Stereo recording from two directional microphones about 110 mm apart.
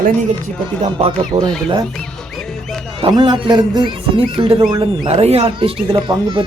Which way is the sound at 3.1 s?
45° right (ahead or behind).